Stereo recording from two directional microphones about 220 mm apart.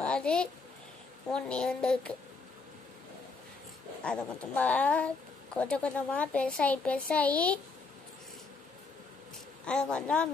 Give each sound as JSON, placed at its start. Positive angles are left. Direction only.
{"t": 0.0, "sound": "a sound", "side_deg": 5}
{"t": 1.3, "sound": "speech", "side_deg": 5}
{"t": 4.0, "sound": "speech", "side_deg": 5}
{"t": 9.7, "sound": "speech", "side_deg": 5}